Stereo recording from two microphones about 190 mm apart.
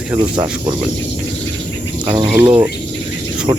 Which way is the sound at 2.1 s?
25° right (ahead or behind).